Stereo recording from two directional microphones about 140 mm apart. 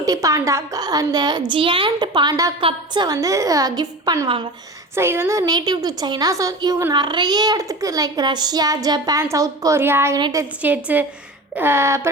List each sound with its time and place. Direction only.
0.0 s a child's voice: 25° right (ahead or behind)
4.9 s a child's voice: 15° right (ahead or behind)
10.2 s a woman's voice: 30° right (ahead or behind)
10.6 s a sound: 10° right (ahead or behind)